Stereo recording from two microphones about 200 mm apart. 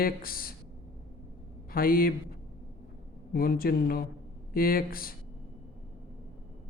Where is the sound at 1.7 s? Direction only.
45° left (ahead or behind).